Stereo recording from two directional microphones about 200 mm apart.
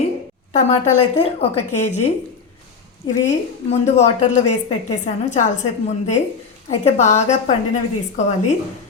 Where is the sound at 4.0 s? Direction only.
35° left (ahead or behind).